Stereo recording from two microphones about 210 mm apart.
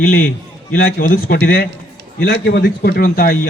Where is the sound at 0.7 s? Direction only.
45° left (ahead or behind).